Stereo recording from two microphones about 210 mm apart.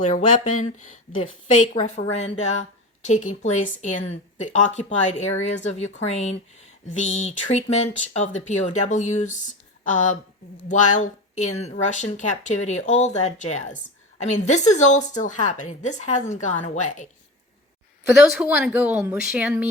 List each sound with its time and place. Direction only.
0.0 s speech: 35° left (ahead or behind)
18.2 s speech: 5° right (ahead or behind)